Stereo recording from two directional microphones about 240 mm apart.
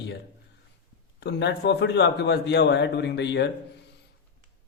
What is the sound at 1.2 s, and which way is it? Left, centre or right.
A man's voice, left.